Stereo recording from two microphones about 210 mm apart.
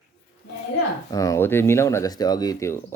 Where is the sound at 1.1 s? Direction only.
15° left (ahead or behind).